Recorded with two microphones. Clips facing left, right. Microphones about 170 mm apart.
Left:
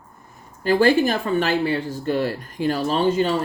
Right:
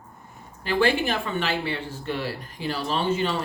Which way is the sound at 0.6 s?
40° left (ahead or behind).